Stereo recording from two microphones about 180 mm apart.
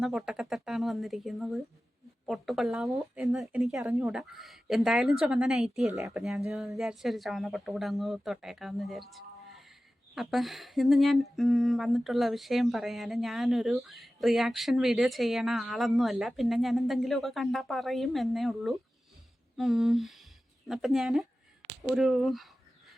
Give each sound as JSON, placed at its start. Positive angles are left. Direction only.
{"t": 0.0, "sound": "speech", "side_deg": -5}